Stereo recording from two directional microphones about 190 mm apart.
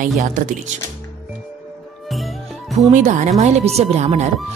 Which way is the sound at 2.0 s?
Centre (ahead or behind).